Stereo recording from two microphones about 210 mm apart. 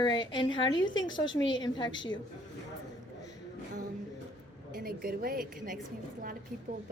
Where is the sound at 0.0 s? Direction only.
20° left (ahead or behind).